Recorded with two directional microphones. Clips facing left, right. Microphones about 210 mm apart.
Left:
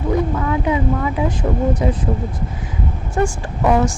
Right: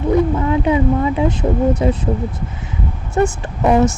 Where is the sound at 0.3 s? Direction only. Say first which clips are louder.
Right 3 dB; 25° right (ahead or behind).